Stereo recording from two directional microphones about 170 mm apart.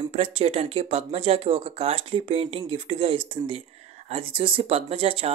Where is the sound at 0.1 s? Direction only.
35° right (ahead or behind).